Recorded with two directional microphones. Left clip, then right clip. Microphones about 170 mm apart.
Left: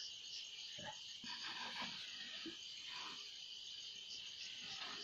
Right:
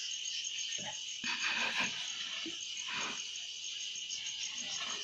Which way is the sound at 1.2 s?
15° right (ahead or behind).